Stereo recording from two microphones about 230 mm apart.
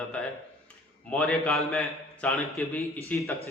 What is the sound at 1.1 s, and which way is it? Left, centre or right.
A man's voice, centre.